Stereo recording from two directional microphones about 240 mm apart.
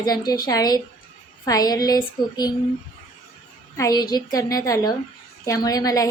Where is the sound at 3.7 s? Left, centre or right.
Centre.